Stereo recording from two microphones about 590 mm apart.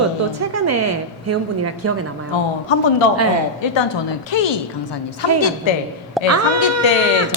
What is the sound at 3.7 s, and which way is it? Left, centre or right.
Speech, left.